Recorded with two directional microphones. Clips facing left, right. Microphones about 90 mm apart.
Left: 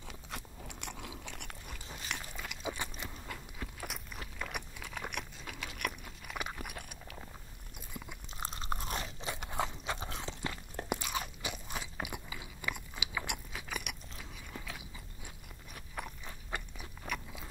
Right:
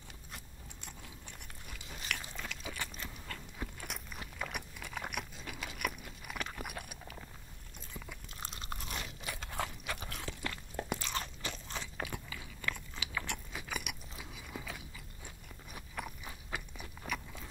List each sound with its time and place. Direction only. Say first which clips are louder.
0.3 s crunch: left 7 dB; 85° left
2.3 s biting: left 3 dB; 15° left (ahead or behind)
3.5 s crunch: even; centre (ahead or behind)
6.3 s a sound: left 2 dB; 10° left (ahead or behind)
6.6 s chewing: right 1 dB; centre (ahead or behind)
7.9 s chewing: left 1 dB; 20° left (ahead or behind)
8.4 s crunch: left 6 dB; 35° left (ahead or behind)
10.9 s crunch: left 4 dB; 10° left (ahead or behind)
13.5 s biting: even; centre (ahead or behind)
16.0 s chewing: even; centre (ahead or behind)